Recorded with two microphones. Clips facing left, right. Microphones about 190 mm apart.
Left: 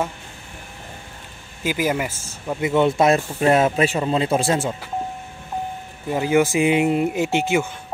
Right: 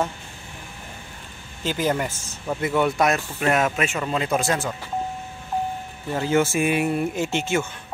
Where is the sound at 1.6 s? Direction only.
10° left (ahead or behind).